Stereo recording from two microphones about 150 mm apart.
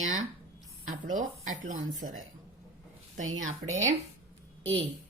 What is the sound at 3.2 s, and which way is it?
Speech, 55° right (ahead or behind).